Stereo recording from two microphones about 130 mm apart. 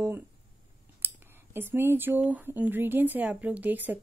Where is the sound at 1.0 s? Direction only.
15° right (ahead or behind).